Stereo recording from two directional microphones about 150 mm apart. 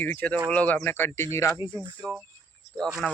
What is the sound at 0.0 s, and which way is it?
Speech, 10° left (ahead or behind).